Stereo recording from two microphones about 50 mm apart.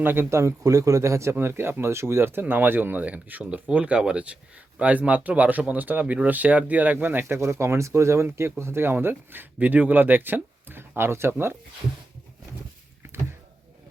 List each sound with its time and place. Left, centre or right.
0.0 s speech: right
0.3 s speech: right
7.4 s speech: right
9.6 s speech: right